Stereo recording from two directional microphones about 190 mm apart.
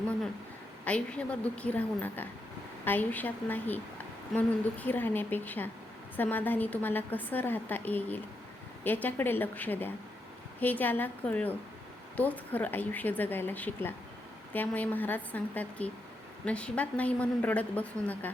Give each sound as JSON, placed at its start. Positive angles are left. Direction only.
{"t": 0.9, "sound": "a woman's voice", "side_deg": 5}